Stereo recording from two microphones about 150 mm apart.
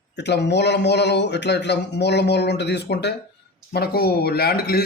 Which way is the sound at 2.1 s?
90° left.